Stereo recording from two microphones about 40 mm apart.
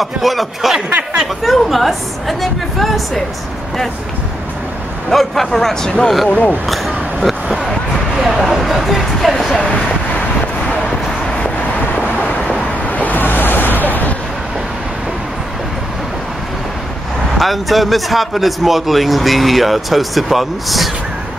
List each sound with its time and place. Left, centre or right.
0.0 s speech: centre
5.1 s speech: centre
6.2 s speech: left
7.4 s a sound: centre
8.2 s speech: centre
12.8 s vehicle: left
17.4 s speech: centre